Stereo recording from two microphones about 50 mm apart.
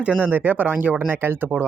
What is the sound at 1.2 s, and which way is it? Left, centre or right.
Speech, right.